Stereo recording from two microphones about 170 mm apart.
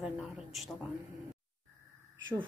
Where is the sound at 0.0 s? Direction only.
Centre (ahead or behind).